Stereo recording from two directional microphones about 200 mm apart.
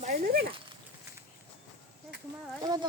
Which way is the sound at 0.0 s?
40° right (ahead or behind).